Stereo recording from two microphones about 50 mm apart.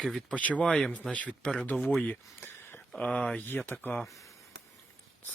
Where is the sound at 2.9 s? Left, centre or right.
Left.